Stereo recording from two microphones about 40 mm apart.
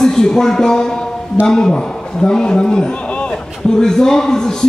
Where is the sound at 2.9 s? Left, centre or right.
Left.